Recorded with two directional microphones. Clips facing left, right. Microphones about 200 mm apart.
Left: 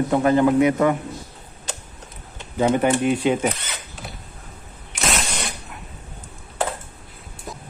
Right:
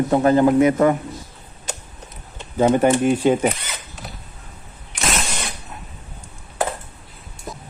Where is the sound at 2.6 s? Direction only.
45° right (ahead or behind).